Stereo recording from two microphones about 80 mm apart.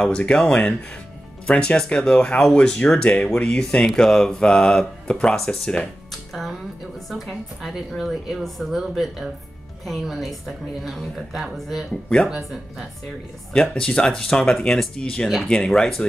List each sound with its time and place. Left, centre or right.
0.0 s speech: centre
7.1 s a woman's voice: centre
13.5 s a woman's voice: centre